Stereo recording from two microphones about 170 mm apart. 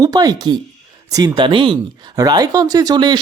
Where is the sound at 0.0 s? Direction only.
20° right (ahead or behind).